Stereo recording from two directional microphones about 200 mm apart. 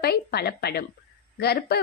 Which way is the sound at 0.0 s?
50° left (ahead or behind).